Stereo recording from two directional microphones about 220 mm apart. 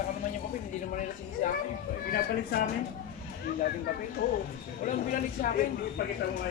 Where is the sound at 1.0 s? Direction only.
40° left (ahead or behind).